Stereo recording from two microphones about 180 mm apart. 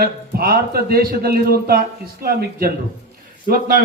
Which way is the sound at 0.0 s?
55° right (ahead or behind).